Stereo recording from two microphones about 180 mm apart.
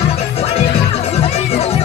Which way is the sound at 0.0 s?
35° left (ahead or behind).